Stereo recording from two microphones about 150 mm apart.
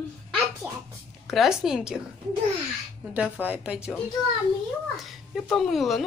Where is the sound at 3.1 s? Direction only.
10° right (ahead or behind).